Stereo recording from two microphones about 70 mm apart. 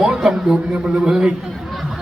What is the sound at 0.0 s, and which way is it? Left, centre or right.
A man's voice, centre.